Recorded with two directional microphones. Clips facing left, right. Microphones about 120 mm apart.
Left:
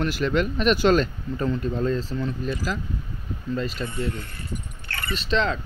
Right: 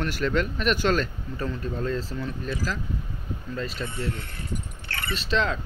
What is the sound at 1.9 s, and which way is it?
Speech, 5° right (ahead or behind).